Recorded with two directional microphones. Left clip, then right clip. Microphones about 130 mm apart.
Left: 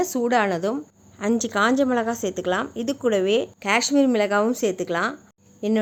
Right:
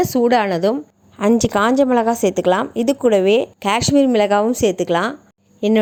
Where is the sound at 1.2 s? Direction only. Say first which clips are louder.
Right 6 dB; 45° right (ahead or behind).